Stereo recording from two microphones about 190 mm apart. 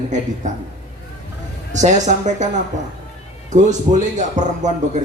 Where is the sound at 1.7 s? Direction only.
40° right (ahead or behind).